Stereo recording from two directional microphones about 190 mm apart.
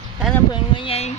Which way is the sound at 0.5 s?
30° left (ahead or behind).